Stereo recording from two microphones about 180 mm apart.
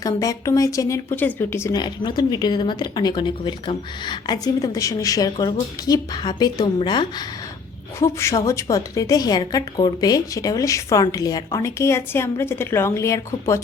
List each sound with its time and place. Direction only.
0.0 s a woman's voice: 20° left (ahead or behind)